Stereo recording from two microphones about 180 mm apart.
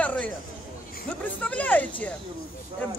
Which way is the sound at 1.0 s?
10° left (ahead or behind).